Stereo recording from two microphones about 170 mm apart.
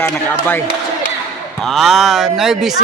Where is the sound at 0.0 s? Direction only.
10° left (ahead or behind).